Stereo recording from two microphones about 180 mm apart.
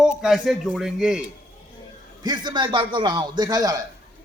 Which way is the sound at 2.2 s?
25° right (ahead or behind).